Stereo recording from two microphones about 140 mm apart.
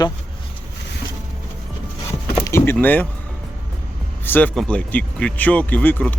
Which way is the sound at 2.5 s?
20° left (ahead or behind).